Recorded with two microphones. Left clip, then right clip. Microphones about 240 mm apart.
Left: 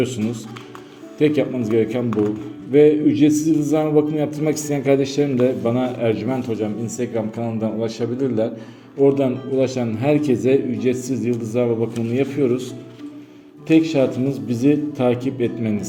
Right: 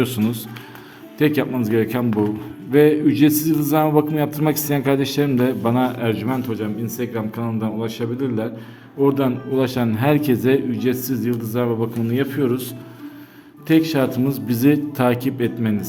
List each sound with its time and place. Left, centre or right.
0.0 s a man's voice: right